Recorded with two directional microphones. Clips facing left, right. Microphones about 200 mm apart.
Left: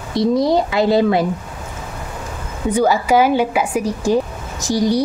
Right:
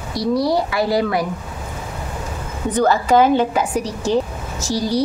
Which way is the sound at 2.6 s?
10° left (ahead or behind).